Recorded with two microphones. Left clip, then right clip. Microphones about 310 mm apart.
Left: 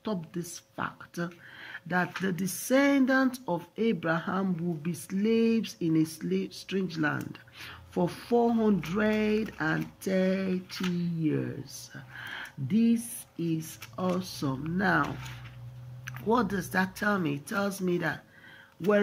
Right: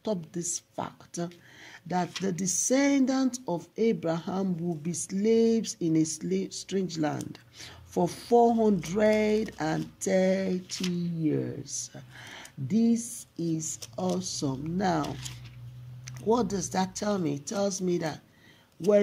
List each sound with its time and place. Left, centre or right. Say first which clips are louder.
0.0 s speech: right 3 dB; right